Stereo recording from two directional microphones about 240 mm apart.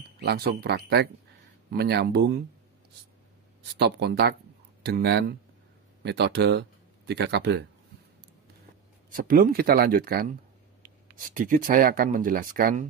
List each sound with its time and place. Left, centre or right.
0.2 s speech: right
3.7 s speech: right
9.1 s speech: right